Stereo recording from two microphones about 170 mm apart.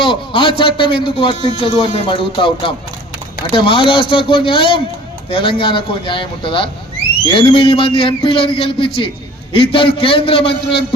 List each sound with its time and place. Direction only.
0.0 s a man's voice: 30° left (ahead or behind)